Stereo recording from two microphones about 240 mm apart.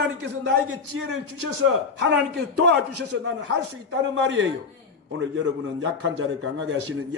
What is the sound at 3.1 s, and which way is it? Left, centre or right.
A man's voice, right.